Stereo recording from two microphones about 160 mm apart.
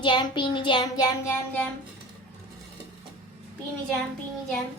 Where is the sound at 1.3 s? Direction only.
10° left (ahead or behind).